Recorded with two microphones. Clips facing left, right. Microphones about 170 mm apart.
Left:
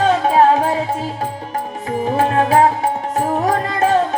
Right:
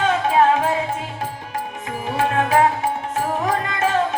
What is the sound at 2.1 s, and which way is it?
Music, 35° left (ahead or behind).